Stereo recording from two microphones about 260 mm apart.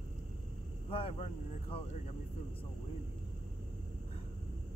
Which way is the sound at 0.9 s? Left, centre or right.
Left.